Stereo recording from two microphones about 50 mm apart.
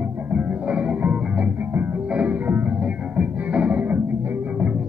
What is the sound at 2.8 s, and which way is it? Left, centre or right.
Music, right.